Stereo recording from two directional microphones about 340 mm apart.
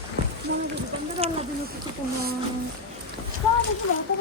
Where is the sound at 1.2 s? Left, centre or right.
Centre.